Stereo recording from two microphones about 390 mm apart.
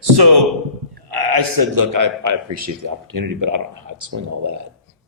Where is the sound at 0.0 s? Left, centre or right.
Right.